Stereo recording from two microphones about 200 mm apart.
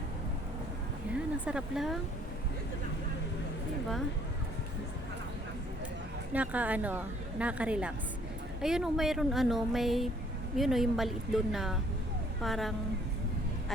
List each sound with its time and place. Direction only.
1.1 s speech: 5° right (ahead or behind)
6.3 s a woman's voice: 5° right (ahead or behind)